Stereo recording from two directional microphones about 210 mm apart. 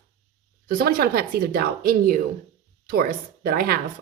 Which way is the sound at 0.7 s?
45° right (ahead or behind).